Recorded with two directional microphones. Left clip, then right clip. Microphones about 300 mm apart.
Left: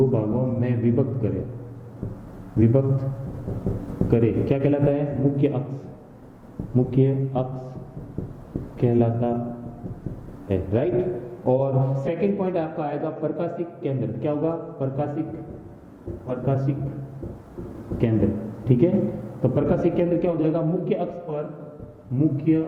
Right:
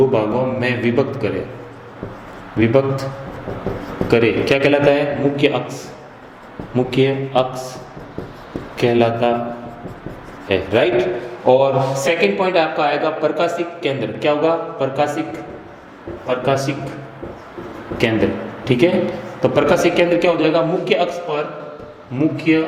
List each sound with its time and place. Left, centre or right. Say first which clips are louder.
0.1 s a man's voice: right 8 dB; centre
2.6 s a man's voice: right 7 dB; centre
6.7 s a man's voice: right 6 dB; centre
9.0 s a man's voice: right 9 dB; centre
10.5 s a man's voice: right 8 dB; centre
16.3 s a man's voice: right 9 dB; centre
17.9 s a man's voice: right 7 dB; centre